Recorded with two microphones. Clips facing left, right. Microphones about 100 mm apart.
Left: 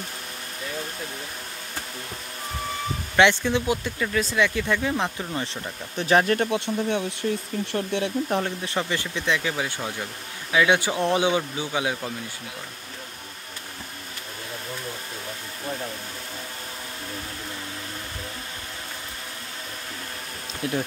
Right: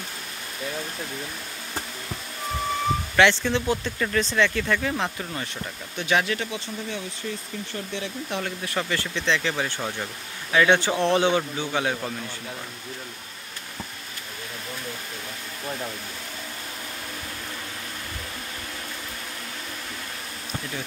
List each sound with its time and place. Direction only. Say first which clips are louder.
3.2 s speech: left 2 dB; 15° left (ahead or behind)
5.9 s speech: left 4 dB; 40° left (ahead or behind); by 8.1 s 60° left (ahead or behind)
8.3 s speech: left 4 dB; 30° left (ahead or behind); by 9.8 s 10° left (ahead or behind)
9.8 s speech: right 1 dB; centre (ahead or behind)
10.5 s speech: right 1 dB; 10° left (ahead or behind)
20.6 s speech: left 11 dB; 70° left (ahead or behind)